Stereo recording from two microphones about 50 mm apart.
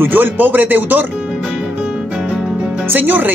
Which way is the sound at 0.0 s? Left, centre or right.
Right.